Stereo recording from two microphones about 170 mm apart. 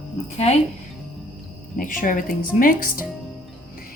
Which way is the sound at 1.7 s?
55° left (ahead or behind).